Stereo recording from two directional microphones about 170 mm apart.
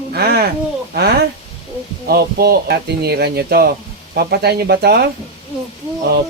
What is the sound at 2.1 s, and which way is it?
Speech, 70° right (ahead or behind).